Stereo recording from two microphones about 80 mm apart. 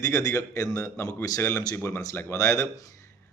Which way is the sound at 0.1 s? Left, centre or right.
Left.